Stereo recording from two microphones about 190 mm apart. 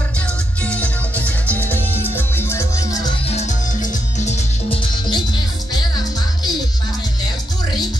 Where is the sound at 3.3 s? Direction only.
40° left (ahead or behind).